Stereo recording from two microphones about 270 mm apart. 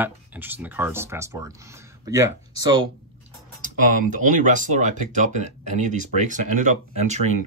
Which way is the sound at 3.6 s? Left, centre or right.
Right.